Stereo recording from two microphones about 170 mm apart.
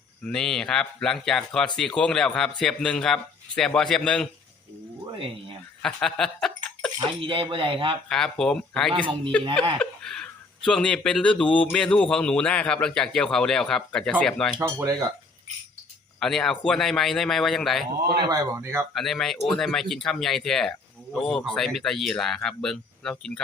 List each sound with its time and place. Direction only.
0.2 s speech: 5° left (ahead or behind)
5.1 s speech: 30° right (ahead or behind)
5.8 s speech: 5° left (ahead or behind)
7.2 s speech: 30° right (ahead or behind)
8.1 s speech: 5° left (ahead or behind)
8.9 s speech: 30° right (ahead or behind)
9.7 s speech: 5° left (ahead or behind)
14.6 s speech: 20° right (ahead or behind)
16.2 s speech: 5° left (ahead or behind)
18.1 s speech: 25° right (ahead or behind)
18.9 s speech: centre (ahead or behind)